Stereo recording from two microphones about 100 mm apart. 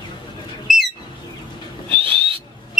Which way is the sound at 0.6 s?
Centre (ahead or behind).